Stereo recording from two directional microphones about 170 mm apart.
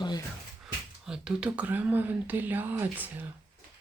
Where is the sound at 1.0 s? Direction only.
5° right (ahead or behind).